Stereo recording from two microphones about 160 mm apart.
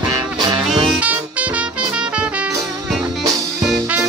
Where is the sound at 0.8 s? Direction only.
10° right (ahead or behind).